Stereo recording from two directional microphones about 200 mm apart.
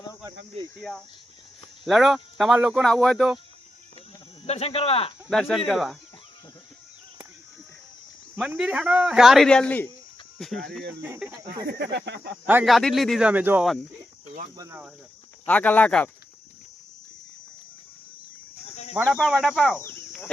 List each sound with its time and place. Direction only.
0.8 s a man's voice: centre (ahead or behind)
4.4 s speech: 30° left (ahead or behind)
5.3 s a man's voice: centre (ahead or behind)
8.4 s a man's voice: 5° right (ahead or behind)
11.0 s speech: 10° right (ahead or behind)
11.6 s a sound: 55° right (ahead or behind)
12.5 s a man's voice: 5° right (ahead or behind)
14.5 s cricket: 20° right (ahead or behind)
15.4 s speech: 10° left (ahead or behind)
19.0 s a man's voice: centre (ahead or behind)
19.7 s a sound: 10° left (ahead or behind)